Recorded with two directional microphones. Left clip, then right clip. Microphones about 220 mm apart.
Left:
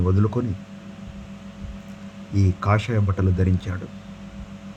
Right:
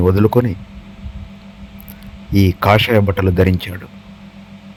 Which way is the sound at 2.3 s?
30° right (ahead or behind).